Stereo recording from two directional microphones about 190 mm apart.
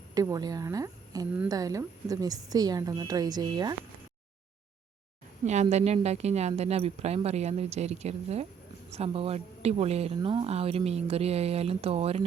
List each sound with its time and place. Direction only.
0.1 s a woman's voice: 20° right (ahead or behind)
5.5 s speech: 35° right (ahead or behind)